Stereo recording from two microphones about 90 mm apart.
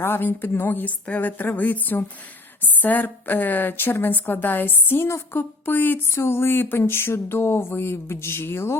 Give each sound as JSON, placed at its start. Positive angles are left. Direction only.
{"t": 0.0, "sound": "a woman's voice", "side_deg": 25}